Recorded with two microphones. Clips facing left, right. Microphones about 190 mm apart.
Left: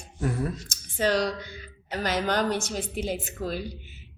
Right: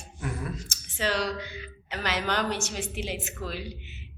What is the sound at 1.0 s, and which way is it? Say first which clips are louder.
A woman's voice: left 4 dB; 40° left (ahead or behind).